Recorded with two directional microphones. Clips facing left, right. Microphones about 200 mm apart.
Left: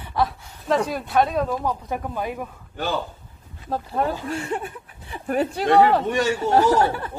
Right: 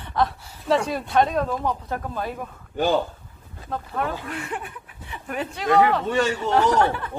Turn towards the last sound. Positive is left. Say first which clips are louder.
# left 1 dB
turn(degrees=35)  # may be behind; listen again after turning